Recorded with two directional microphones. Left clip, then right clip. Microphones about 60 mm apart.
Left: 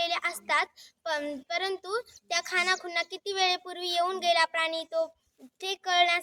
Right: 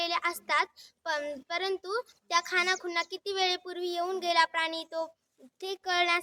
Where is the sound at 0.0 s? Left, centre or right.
Right.